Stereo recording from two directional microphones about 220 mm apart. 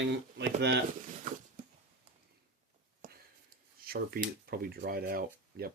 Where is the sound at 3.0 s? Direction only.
35° right (ahead or behind).